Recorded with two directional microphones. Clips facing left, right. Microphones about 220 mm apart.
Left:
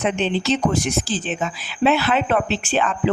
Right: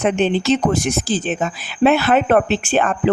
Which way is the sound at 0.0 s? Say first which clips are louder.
Right 4 dB; 50° right (ahead or behind).